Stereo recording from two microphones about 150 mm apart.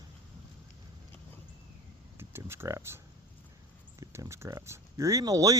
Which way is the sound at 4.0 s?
20° right (ahead or behind).